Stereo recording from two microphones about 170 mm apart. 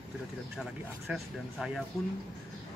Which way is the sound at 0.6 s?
Centre (ahead or behind).